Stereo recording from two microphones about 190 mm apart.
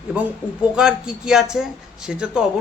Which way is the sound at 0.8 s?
5° right (ahead or behind).